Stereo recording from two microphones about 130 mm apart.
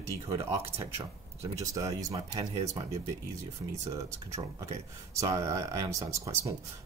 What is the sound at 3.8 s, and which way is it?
Speech, 25° right (ahead or behind).